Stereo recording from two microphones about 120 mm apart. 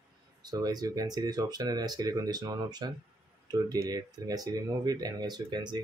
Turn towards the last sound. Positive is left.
turn(degrees=-35)  # may be behind; listen again after turning